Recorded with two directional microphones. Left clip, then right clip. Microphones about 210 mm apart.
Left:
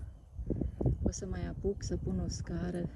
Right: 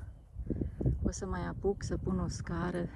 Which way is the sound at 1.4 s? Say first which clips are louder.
Right 2 dB; 20° right (ahead or behind).